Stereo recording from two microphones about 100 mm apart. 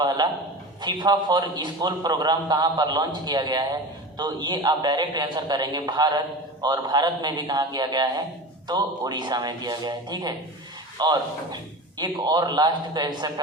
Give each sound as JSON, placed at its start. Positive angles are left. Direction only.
{"t": 0.0, "sound": "a man's voice", "side_deg": -45}